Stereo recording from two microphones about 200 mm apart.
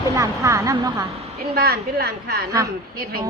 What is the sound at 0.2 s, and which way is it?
Speech, 15° right (ahead or behind).